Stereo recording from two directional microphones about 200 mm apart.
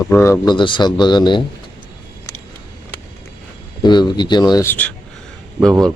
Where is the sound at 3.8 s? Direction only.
20° left (ahead or behind).